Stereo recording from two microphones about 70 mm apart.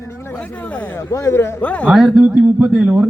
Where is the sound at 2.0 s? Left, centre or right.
Centre.